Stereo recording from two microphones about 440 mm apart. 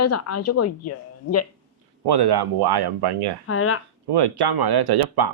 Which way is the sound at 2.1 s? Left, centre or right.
Right.